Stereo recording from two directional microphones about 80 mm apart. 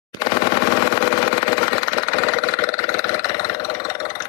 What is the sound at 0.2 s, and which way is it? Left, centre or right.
Sewing machine, left.